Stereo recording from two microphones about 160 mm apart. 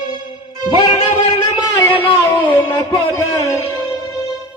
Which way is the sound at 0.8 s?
30° left (ahead or behind).